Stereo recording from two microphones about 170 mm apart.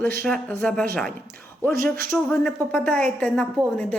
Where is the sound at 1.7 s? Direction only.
60° right (ahead or behind).